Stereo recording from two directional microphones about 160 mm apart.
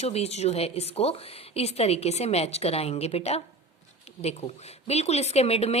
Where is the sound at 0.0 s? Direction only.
40° left (ahead or behind).